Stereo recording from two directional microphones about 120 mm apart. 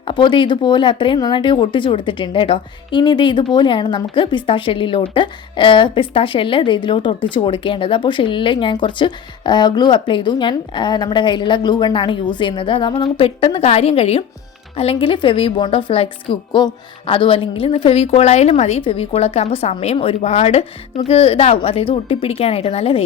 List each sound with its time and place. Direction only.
0.0 s a woman's voice: 40° left (ahead or behind); by 23.0 s 55° left (ahead or behind)